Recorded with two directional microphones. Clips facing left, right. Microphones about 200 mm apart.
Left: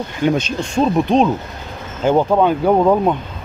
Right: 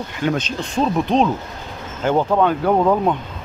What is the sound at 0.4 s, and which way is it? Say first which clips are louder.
Speech: left 3 dB; 10° left (ahead or behind).